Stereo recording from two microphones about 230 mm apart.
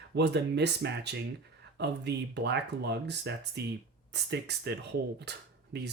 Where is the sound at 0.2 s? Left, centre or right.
Right.